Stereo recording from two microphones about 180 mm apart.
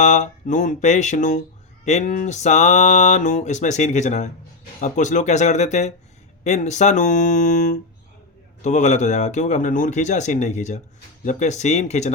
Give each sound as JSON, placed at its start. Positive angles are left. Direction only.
{"t": 0.0, "sound": "speech", "side_deg": 40}